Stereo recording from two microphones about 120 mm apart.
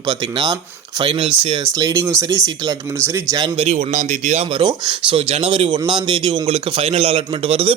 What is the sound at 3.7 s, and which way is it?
Speech, 65° right (ahead or behind).